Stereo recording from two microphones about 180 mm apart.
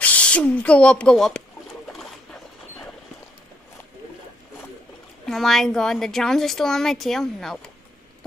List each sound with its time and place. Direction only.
0.0 s speech: 10° left (ahead or behind)
1.9 s dog: centre (ahead or behind)
5.2 s a woman's voice: centre (ahead or behind)